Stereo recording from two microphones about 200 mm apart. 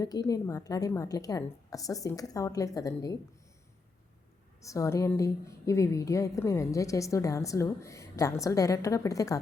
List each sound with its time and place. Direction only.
0.0 s a woman's voice: 15° left (ahead or behind)
4.6 s a woman's voice: 15° left (ahead or behind)